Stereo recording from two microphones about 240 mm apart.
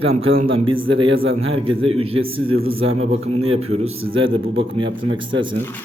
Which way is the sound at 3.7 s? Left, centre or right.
Right.